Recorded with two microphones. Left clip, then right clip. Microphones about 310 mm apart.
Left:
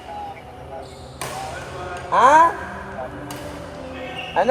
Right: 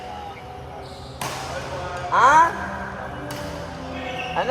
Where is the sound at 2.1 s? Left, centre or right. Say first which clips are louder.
Left 2 dB; left.